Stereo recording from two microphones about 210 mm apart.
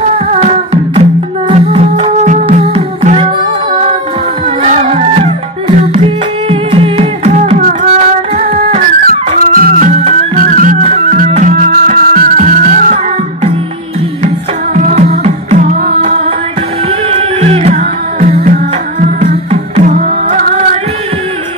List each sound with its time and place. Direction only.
0.3 s music: 30° right (ahead or behind)
4.6 s music: 30° right (ahead or behind)
15.2 s music: 35° right (ahead or behind)
19.1 s music: 35° right (ahead or behind)